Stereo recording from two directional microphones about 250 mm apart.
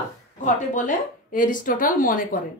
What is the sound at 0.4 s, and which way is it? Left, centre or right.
Speech, left.